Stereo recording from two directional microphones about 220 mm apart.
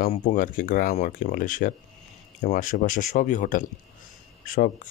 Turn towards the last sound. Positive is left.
turn(degrees=40)  # may be behind; listen again after turning